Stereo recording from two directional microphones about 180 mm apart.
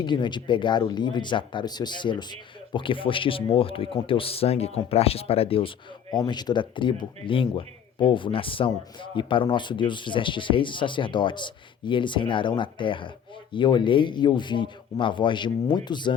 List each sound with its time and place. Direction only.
0.0 s speech: 25° left (ahead or behind)